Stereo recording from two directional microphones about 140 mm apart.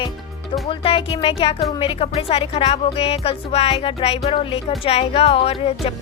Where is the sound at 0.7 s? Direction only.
40° left (ahead or behind).